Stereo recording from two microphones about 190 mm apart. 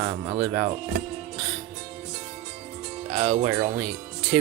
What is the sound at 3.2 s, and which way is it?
Speech, 40° right (ahead or behind).